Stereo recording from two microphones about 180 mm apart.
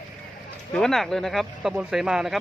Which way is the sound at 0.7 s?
Centre (ahead or behind).